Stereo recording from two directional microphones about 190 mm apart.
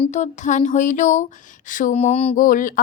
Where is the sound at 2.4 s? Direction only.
45° left (ahead or behind).